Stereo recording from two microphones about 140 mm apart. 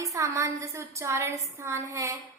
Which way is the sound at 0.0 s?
20° right (ahead or behind).